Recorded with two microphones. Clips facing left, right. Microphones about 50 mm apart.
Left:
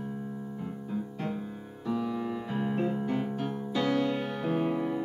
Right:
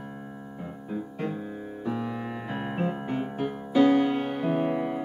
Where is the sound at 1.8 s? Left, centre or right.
Right.